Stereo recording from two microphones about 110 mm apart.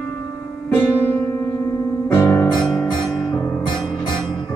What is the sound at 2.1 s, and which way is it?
Music, 20° left (ahead or behind).